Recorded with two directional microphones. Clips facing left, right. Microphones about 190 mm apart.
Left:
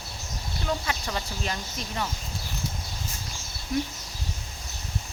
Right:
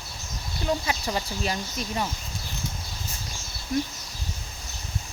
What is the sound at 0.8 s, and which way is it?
Speech, 15° right (ahead or behind).